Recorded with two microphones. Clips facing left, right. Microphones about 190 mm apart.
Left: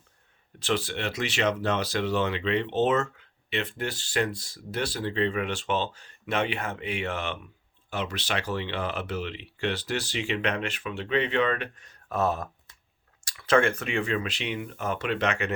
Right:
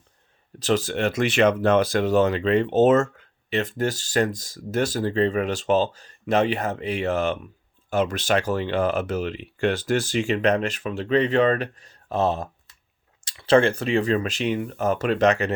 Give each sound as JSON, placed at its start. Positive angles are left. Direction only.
{"t": 0.6, "sound": "speech", "side_deg": -40}